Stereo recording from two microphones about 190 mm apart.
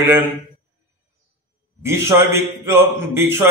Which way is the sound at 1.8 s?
15° right (ahead or behind).